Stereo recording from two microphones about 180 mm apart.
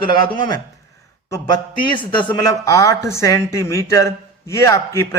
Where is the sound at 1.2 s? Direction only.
20° left (ahead or behind).